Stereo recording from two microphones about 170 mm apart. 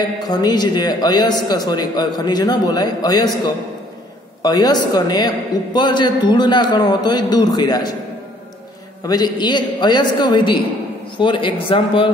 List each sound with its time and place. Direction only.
0.3 s a man's voice: 25° left (ahead or behind)
9.0 s a man's voice: 25° left (ahead or behind)